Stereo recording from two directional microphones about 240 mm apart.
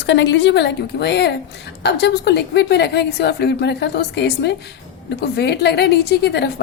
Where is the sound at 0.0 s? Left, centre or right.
Left.